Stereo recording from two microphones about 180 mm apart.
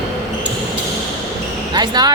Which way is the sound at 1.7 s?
25° right (ahead or behind).